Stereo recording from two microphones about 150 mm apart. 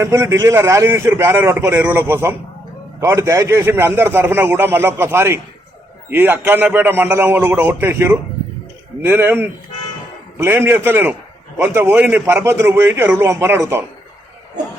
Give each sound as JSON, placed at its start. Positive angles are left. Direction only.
{"t": 0.0, "sound": "a man's voice", "side_deg": -20}